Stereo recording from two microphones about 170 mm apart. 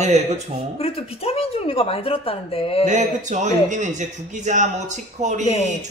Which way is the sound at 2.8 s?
45° right (ahead or behind).